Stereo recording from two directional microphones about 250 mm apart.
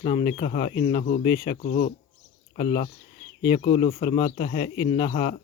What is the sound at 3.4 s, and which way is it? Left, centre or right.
Speech, left.